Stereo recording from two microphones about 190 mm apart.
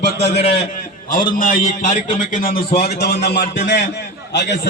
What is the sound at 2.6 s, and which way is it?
Speech, 35° left (ahead or behind).